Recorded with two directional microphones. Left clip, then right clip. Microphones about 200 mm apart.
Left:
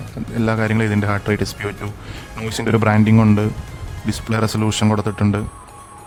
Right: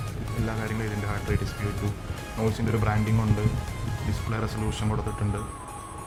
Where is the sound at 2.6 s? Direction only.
60° left (ahead or behind).